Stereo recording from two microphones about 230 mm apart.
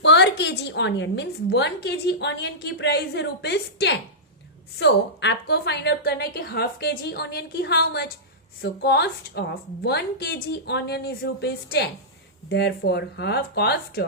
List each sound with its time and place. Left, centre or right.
0.0 s a woman's voice: left